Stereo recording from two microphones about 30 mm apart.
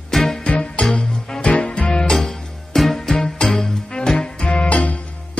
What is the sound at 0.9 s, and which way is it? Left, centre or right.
Music, left.